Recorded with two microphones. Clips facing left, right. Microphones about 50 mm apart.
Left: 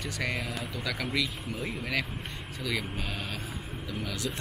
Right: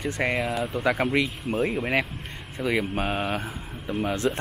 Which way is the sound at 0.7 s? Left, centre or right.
Right.